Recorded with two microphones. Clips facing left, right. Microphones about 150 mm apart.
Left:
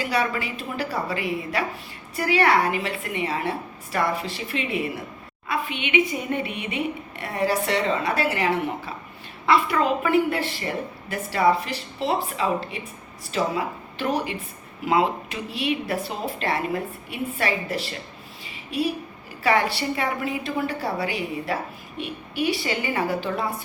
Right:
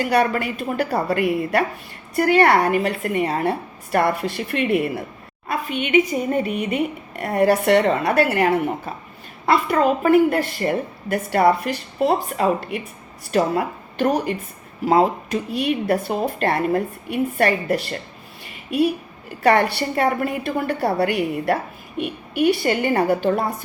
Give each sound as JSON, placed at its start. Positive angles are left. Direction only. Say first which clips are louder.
{"t": 0.0, "sound": "a woman's voice", "louder": "right 6 dB", "side_deg": -55}
{"t": 5.5, "sound": "a woman's voice", "louder": "right 4 dB", "side_deg": -45}
{"t": 18.4, "sound": "a sound", "louder": "right 7 dB", "side_deg": -55}
{"t": 19.4, "sound": "a woman's voice", "louder": "right 5 dB", "side_deg": -55}